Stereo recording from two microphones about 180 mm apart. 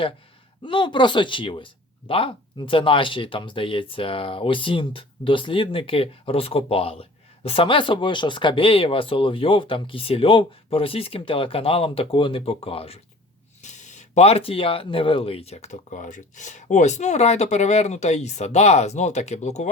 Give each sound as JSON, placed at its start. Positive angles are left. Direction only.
{"t": 0.6, "sound": "speech", "side_deg": 25}